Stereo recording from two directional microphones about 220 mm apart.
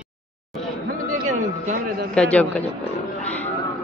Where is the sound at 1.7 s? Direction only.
40° right (ahead or behind).